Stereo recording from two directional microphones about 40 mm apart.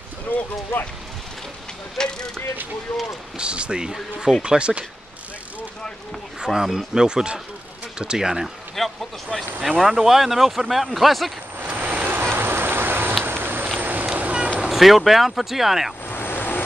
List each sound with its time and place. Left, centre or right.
0.3 s speech: left
2.0 s mechanisms: centre
3.3 s speech: right
6.4 s speech: centre
8.8 s a man's voice: centre
9.6 s speech: centre
11.7 s vehicle: right
12.1 s a sound: right
13.7 s vehicle: right
14.0 s vehicle: right
14.7 s speech: centre
16.1 s vehicle: left